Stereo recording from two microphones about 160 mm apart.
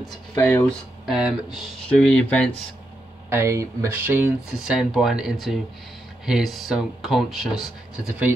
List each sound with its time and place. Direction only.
0.0 s speech: centre (ahead or behind)
3.3 s speech: 15° right (ahead or behind)
4.6 s speech: centre (ahead or behind)